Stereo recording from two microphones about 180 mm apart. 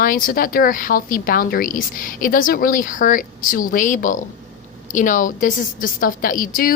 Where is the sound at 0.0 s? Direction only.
50° left (ahead or behind).